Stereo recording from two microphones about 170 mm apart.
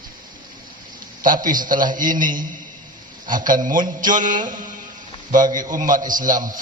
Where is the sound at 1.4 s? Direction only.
55° right (ahead or behind).